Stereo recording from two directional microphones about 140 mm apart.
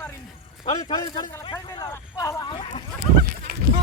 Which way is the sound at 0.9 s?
30° left (ahead or behind).